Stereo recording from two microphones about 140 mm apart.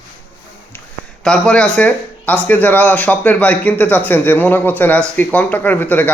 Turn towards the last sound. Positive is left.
turn(degrees=10)  # may be behind; listen again after turning